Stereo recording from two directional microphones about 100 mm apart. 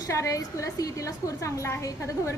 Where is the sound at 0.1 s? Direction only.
30° left (ahead or behind).